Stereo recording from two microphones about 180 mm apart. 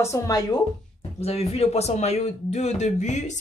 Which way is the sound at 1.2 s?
35° left (ahead or behind).